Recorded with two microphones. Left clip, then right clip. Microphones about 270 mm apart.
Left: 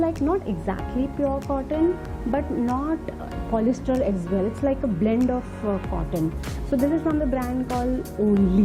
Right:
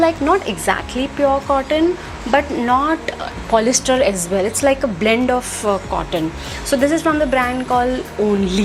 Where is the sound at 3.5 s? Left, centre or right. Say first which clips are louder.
Right 9 dB; centre.